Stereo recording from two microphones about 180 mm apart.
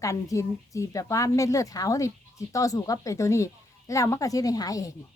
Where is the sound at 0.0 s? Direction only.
15° left (ahead or behind).